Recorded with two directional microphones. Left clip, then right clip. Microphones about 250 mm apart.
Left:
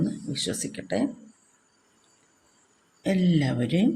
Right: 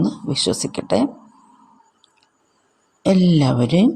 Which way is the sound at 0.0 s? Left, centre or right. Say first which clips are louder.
Right 9 dB; right.